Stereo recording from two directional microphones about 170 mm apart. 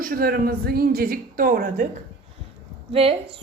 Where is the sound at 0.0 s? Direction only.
60° right (ahead or behind).